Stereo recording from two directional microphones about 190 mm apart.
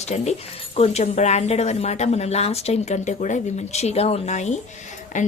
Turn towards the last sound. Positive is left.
turn(degrees=40)  # may be behind; listen again after turning